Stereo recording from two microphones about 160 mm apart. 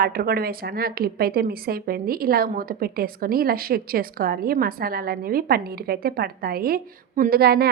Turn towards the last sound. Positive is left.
turn(degrees=-75)  # may be behind; listen again after turning